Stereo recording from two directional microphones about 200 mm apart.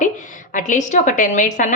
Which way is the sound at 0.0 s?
40° left (ahead or behind).